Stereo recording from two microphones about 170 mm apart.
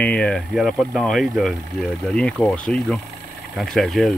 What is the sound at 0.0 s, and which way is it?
Speech, 5° left (ahead or behind).